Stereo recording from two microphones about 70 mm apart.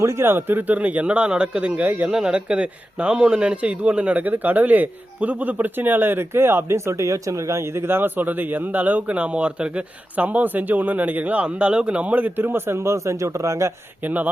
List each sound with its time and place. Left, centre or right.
0.0 s speech: right
2.0 s speech: centre; by 13.7 s right
14.0 s speech: right